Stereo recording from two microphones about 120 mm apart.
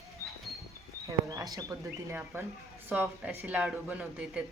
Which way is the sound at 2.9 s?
10° right (ahead or behind).